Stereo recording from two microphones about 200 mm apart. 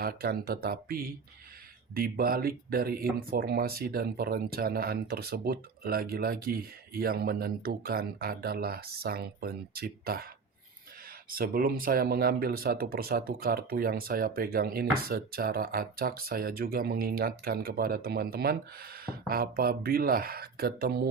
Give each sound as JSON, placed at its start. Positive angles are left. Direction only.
{"t": 0.0, "sound": "speech", "side_deg": -50}
{"t": 11.3, "sound": "speech", "side_deg": -45}